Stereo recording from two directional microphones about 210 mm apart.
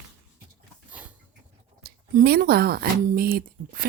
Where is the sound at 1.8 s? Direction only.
50° right (ahead or behind).